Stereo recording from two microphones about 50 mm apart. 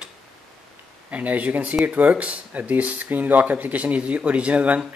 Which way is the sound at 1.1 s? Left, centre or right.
Right.